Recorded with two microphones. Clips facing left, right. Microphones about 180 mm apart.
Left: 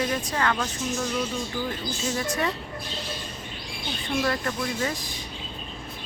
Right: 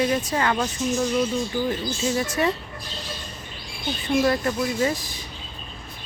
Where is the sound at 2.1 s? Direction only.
10° right (ahead or behind).